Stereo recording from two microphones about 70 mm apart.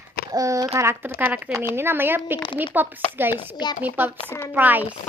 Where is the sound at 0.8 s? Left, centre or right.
Right.